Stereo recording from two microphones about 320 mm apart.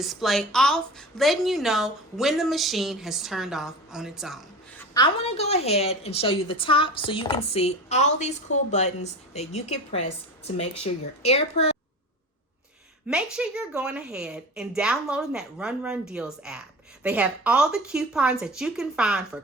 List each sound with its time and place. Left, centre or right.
0.0 s a woman's voice: centre
4.9 s a woman's voice: centre
13.3 s a woman's voice: centre